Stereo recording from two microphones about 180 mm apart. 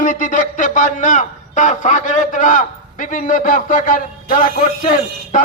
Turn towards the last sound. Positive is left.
turn(degrees=45)  # may be behind; listen again after turning